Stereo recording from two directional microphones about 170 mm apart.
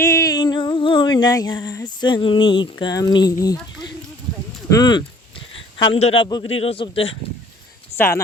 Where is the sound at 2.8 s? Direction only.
25° left (ahead or behind).